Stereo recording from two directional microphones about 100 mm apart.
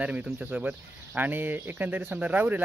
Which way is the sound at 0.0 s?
15° right (ahead or behind).